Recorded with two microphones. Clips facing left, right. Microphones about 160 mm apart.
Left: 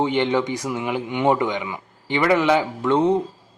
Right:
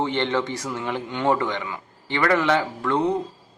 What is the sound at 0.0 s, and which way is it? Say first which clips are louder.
Speech: left 3 dB; 15° left (ahead or behind).